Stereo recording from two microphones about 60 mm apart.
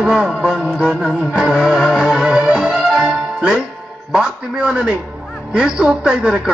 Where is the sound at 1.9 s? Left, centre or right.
Centre.